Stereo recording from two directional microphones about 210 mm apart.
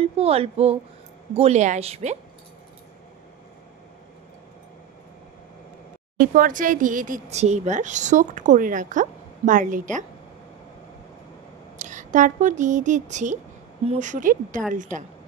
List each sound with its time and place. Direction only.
0.0 s speech: 30° right (ahead or behind)
6.1 s speech: 40° right (ahead or behind)
11.8 s speech: 35° right (ahead or behind)